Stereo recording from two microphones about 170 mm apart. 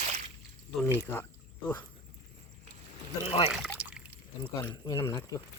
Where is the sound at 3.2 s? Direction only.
35° left (ahead or behind).